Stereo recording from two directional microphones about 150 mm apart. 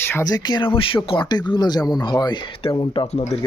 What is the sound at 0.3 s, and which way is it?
Speech, 30° left (ahead or behind).